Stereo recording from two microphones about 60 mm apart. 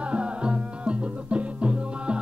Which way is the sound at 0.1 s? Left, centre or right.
Centre.